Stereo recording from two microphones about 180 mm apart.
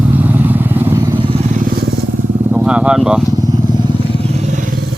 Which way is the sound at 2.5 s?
5° right (ahead or behind).